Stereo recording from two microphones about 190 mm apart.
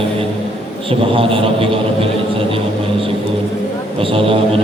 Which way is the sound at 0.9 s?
30° right (ahead or behind).